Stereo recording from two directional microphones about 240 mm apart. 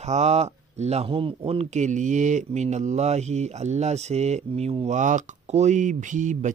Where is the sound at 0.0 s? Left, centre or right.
Right.